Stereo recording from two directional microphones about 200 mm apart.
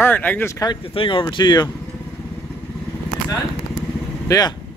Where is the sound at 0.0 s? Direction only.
10° left (ahead or behind).